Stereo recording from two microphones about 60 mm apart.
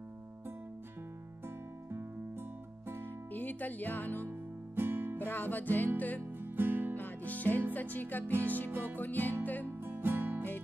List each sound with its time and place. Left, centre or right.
3.3 s music: left
4.7 s music: right
5.2 s music: left
6.4 s music: right
7.0 s music: left
8.6 s music: right
8.9 s music: left
9.7 s music: right